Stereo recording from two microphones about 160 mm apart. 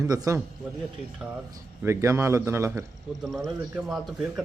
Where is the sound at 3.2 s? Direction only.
Centre (ahead or behind).